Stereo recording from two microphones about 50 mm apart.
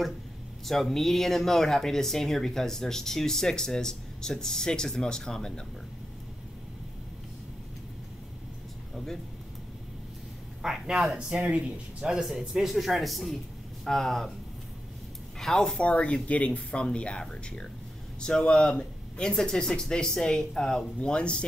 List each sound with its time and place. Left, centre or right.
0.7 s speech: centre
8.9 s speech: centre
10.6 s speech: centre
11.1 s speech: centre
15.3 s speech: centre
15.8 s speech: left